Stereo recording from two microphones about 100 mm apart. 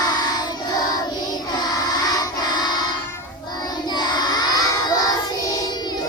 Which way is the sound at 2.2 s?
45° left (ahead or behind).